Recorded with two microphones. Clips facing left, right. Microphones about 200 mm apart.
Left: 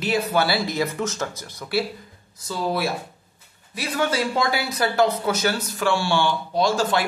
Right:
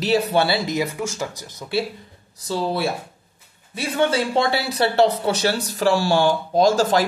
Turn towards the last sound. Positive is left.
turn(degrees=-40)  # may be behind; listen again after turning